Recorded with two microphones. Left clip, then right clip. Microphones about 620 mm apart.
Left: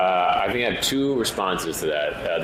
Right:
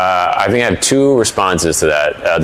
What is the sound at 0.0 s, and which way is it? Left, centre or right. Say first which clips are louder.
Speech: right 7 dB; right.